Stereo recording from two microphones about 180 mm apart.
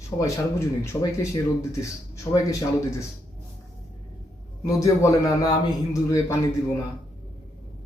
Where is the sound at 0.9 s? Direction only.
15° left (ahead or behind).